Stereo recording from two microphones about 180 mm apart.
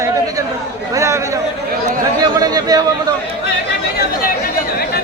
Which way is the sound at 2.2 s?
20° right (ahead or behind).